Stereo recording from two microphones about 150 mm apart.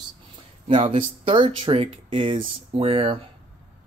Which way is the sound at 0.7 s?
40° right (ahead or behind).